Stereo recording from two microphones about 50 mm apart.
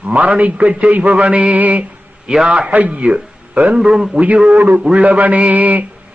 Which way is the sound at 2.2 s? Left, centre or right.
Centre.